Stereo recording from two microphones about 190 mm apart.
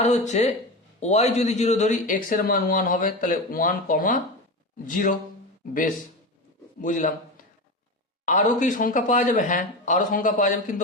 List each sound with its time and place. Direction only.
0.0 s a man's voice: 35° left (ahead or behind)
6.8 s a man's voice: 40° left (ahead or behind)
8.2 s a man's voice: 40° left (ahead or behind)